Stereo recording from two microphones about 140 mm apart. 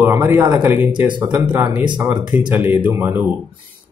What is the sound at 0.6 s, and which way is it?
Speech, 15° right (ahead or behind).